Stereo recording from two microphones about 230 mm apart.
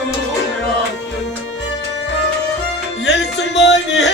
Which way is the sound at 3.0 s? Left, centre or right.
Left.